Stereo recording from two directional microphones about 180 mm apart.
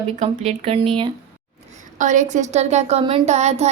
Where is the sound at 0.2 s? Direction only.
35° right (ahead or behind).